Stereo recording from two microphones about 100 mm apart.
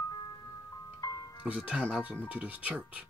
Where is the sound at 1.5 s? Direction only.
10° right (ahead or behind).